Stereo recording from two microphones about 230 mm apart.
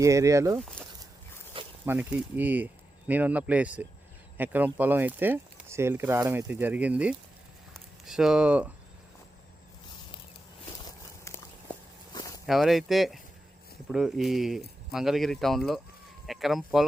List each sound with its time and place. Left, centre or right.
0.0 s speech: centre
1.8 s speech: centre
11.3 s walk: centre
12.1 s a sound: centre
12.5 s speech: centre